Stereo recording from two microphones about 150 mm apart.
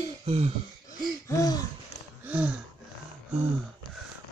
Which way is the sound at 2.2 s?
10° right (ahead or behind).